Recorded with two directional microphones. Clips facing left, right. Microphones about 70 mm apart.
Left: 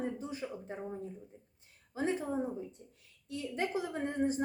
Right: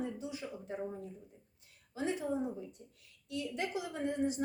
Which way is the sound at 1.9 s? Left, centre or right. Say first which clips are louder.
Left 1 dB; left.